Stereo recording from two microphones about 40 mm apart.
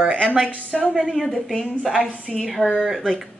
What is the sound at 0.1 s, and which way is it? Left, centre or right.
Speech, right.